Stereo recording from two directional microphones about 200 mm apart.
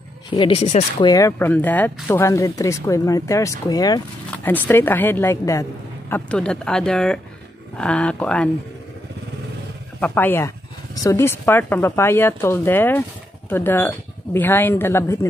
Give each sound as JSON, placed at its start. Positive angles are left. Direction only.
{"t": 0.3, "sound": "speech", "side_deg": 25}
{"t": 1.0, "sound": "a woman's voice", "side_deg": 15}
{"t": 9.9, "sound": "a woman's voice", "side_deg": 10}